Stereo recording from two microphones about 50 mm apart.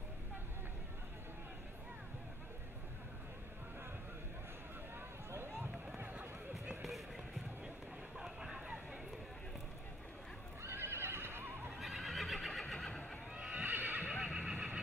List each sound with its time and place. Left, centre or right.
5.3 s run: right
8.2 s a sound: centre
10.6 s neigh: right
11.8 s neigh: centre
12.7 s neigh: centre
13.3 s neigh: centre
13.7 s neigh: right
14.2 s vehicle: centre